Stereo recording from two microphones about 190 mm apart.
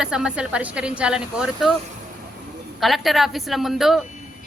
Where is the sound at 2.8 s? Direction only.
Centre (ahead or behind).